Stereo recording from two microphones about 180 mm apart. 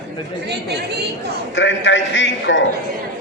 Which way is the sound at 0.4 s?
65° right (ahead or behind).